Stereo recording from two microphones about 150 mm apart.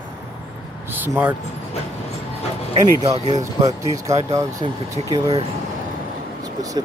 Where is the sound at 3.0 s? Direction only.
45° right (ahead or behind).